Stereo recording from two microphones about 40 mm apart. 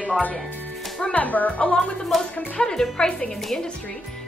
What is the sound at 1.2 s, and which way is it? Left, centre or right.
Speech, left.